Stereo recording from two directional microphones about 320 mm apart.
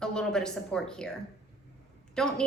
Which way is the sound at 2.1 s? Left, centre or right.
Centre.